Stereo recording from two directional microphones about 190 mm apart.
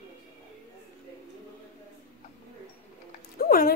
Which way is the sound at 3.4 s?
50° left (ahead or behind).